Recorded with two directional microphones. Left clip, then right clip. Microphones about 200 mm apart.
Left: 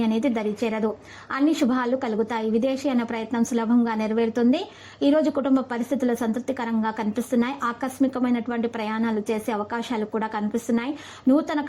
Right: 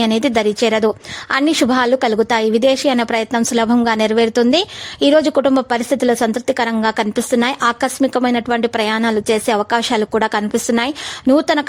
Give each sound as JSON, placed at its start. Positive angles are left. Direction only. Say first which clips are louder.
{"t": 0.0, "sound": "a woman's voice", "louder": "right 10 dB", "side_deg": -45}